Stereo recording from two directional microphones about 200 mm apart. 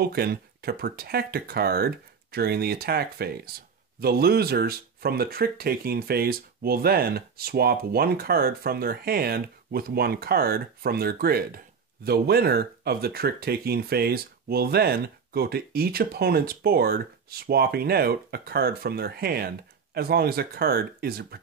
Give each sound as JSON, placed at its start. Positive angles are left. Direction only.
{"t": 0.0, "sound": "speech", "side_deg": -50}